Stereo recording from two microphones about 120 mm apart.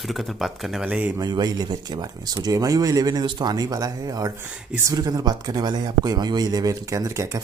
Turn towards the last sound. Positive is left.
turn(degrees=-25)  # may be behind; listen again after turning